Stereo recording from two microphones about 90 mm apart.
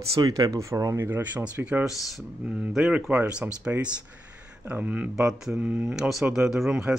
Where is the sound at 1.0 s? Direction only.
25° right (ahead or behind).